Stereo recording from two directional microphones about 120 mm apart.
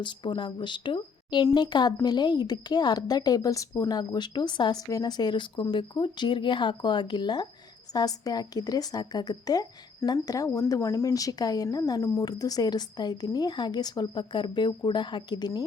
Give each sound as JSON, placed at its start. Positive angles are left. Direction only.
{"t": 0.0, "sound": "a woman's voice", "side_deg": 40}